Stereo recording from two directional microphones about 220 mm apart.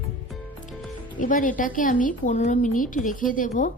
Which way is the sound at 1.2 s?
35° left (ahead or behind).